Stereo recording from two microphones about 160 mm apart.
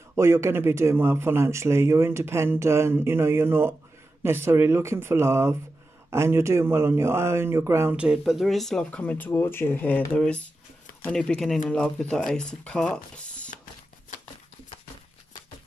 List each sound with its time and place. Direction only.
0.1 s speech: 15° right (ahead or behind); by 13.5 s 5° left (ahead or behind)